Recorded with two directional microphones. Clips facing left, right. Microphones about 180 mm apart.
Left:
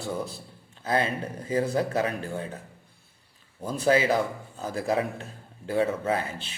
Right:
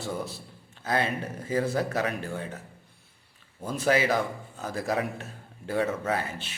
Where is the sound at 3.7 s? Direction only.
30° left (ahead or behind).